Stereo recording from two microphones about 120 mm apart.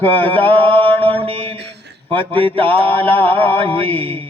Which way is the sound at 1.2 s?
50° right (ahead or behind).